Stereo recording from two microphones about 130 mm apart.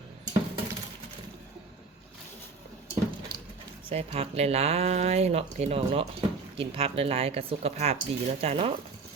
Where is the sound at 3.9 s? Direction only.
50° right (ahead or behind).